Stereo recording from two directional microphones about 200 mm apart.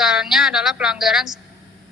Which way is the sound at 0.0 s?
5° right (ahead or behind).